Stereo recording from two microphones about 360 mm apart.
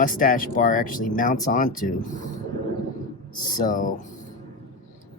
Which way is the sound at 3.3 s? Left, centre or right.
Left.